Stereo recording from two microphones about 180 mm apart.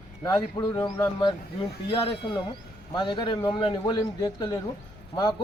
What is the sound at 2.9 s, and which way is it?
A man's voice, 25° left (ahead or behind).